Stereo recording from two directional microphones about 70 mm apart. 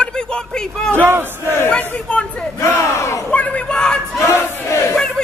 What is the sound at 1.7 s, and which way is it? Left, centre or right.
Crowd, centre.